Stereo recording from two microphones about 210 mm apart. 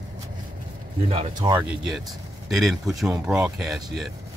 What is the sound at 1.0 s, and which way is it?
Speech, 25° right (ahead or behind).